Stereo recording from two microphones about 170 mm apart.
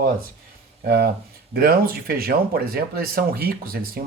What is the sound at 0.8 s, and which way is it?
Speech, 65° right (ahead or behind).